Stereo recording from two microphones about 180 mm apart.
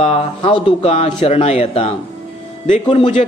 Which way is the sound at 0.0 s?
35° left (ahead or behind).